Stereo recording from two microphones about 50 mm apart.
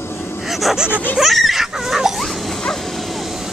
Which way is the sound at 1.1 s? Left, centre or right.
Centre.